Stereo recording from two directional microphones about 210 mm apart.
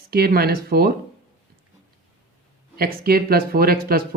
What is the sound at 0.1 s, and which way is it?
Speech, 45° right (ahead or behind).